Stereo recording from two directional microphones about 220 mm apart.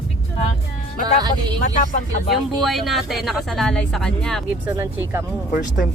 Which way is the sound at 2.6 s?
Centre (ahead or behind).